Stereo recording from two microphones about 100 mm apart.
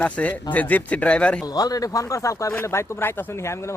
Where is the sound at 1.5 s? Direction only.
40° left (ahead or behind).